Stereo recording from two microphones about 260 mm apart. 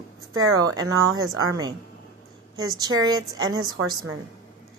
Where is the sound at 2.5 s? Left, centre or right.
Centre.